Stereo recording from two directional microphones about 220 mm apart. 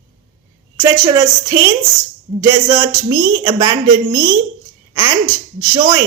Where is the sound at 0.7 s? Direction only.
15° right (ahead or behind).